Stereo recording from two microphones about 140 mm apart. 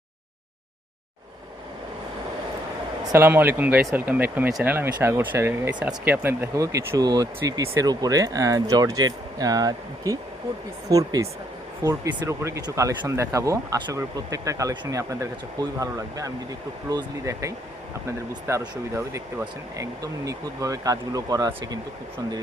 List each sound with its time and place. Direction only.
3.0 s speech: 20° right (ahead or behind)